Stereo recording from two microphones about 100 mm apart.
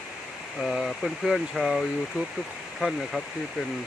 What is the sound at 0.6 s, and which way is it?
Speech, centre (ahead or behind).